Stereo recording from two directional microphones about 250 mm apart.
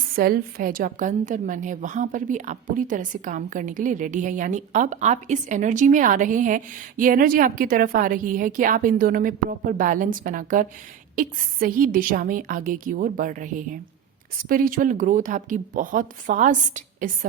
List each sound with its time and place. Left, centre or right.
0.2 s a woman's voice: right